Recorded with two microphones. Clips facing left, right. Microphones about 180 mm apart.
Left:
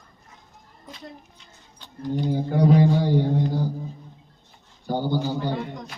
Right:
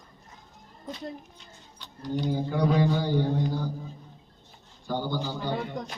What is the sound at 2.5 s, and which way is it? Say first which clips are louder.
Mantra: left 6 dB; 30° left (ahead or behind).